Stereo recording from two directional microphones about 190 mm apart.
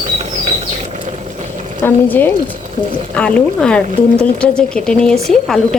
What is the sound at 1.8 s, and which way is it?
Speech, 10° left (ahead or behind).